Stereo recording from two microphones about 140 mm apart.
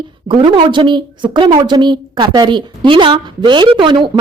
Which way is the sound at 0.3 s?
35° right (ahead or behind).